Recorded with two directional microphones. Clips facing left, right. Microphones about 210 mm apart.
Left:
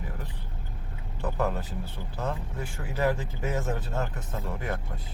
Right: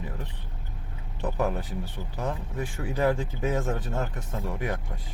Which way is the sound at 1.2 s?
15° right (ahead or behind).